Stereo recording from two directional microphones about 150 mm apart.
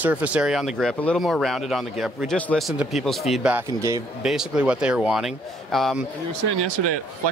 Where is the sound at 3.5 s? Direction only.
20° right (ahead or behind).